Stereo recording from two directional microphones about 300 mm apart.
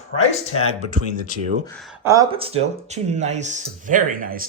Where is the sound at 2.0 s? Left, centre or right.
Centre.